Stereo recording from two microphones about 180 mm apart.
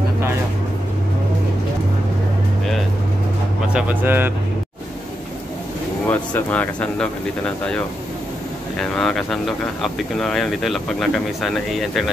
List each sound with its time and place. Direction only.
3.6 s speech: 5° right (ahead or behind)
6.0 s speech: 10° left (ahead or behind)